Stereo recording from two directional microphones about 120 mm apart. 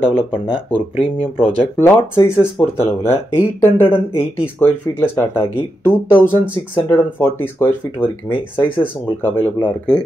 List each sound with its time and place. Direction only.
0.0 s speech: 15° left (ahead or behind)
0.7 s speech: 50° left (ahead or behind)
1.8 s speech: 20° left (ahead or behind)